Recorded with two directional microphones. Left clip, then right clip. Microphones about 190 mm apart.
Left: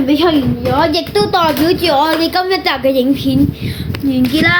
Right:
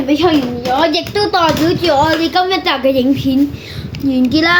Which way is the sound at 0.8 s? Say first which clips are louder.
Left 1 dB; 25° left (ahead or behind).